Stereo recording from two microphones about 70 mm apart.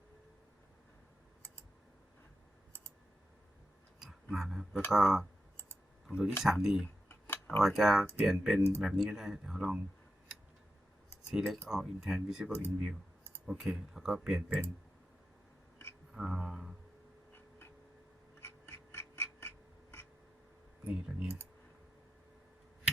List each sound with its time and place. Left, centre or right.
4.0 s a sound: centre
4.9 s speech: centre
6.4 s speech: centre
7.1 s tick-tock: left
7.6 s speech: centre
11.3 s speech: centre
12.5 s speech: left
13.5 s speech: centre
16.1 s speech: centre
18.3 s duck: left
20.8 s speech: centre